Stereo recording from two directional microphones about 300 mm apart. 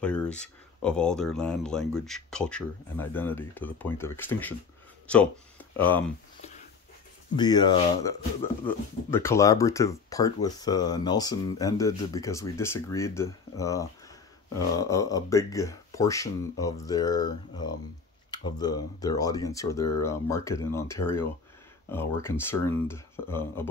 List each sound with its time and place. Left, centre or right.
0.0 s speech: centre
7.3 s speech: centre